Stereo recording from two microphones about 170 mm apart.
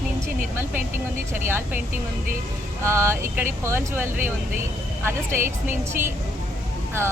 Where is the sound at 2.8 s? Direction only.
15° right (ahead or behind).